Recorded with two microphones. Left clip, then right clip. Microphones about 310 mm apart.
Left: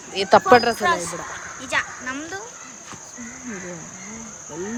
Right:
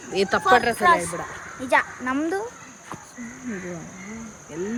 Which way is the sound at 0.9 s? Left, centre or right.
Right.